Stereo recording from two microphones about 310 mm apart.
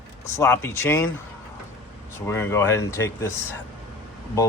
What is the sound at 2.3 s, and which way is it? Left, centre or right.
A man's voice, centre.